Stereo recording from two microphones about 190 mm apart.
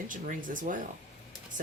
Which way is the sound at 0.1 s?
45° right (ahead or behind).